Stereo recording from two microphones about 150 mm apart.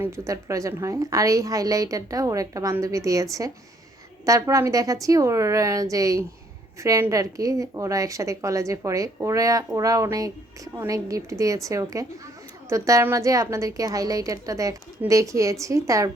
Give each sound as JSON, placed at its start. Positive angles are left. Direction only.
{"t": 0.0, "sound": "a woman's voice", "side_deg": -20}